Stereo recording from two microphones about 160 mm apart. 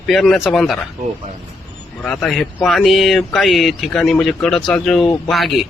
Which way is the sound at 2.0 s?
5° left (ahead or behind).